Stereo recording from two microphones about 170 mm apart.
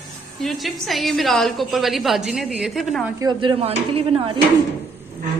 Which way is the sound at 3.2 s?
30° right (ahead or behind).